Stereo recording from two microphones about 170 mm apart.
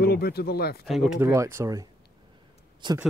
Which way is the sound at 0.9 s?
Centre (ahead or behind).